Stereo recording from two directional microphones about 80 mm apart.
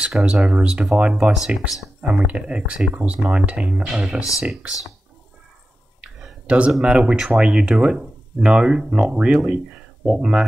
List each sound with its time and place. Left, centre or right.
0.2 s speech: centre
6.4 s speech: centre